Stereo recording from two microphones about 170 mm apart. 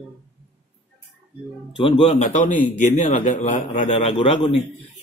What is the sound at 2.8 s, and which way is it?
A man's voice, 45° left (ahead or behind).